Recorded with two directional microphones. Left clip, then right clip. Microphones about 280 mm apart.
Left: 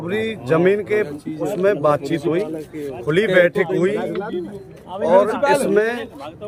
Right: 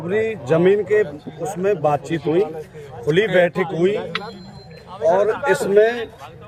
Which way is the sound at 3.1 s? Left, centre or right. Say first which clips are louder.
Left 1 dB; centre.